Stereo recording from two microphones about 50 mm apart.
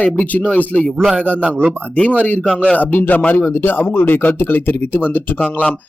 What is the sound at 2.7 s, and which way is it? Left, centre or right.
Speech, left.